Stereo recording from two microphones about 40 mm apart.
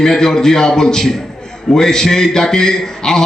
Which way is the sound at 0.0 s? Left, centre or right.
Centre.